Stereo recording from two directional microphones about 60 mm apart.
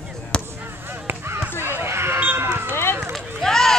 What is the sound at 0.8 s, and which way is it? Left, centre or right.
Honk, right.